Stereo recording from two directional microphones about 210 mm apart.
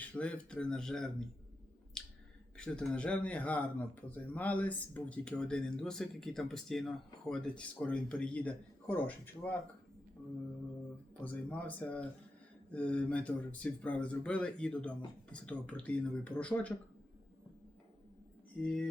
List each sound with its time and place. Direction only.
0.0 s speech: 5° left (ahead or behind)
2.0 s finger snapping: 5° left (ahead or behind)
2.6 s speech: 5° left (ahead or behind)
11.2 s speech: 5° left (ahead or behind)
18.6 s speech: 5° left (ahead or behind)